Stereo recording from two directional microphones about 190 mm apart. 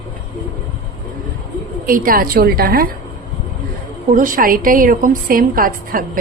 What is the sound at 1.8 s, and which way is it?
A woman's voice, 50° right (ahead or behind).